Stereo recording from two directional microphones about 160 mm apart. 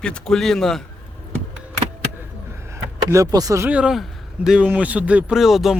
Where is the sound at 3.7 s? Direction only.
5° right (ahead or behind).